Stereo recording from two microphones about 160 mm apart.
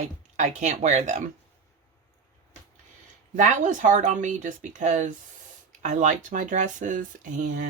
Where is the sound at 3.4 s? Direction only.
50° right (ahead or behind).